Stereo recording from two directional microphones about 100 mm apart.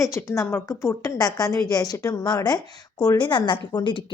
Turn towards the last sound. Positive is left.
turn(degrees=55)  # may be behind; listen again after turning